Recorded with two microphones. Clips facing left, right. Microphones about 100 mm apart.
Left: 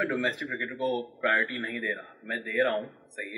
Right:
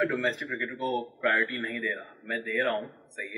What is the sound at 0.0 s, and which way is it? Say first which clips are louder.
Speech: right 1 dB; 5° left (ahead or behind).